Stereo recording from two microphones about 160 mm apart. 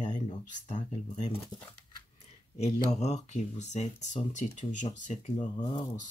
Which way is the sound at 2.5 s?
45° left (ahead or behind).